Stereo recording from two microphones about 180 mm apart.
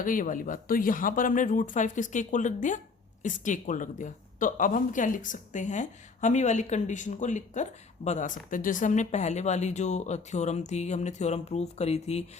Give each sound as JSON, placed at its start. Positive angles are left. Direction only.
{"t": 0.0, "sound": "a woman's voice", "side_deg": 50}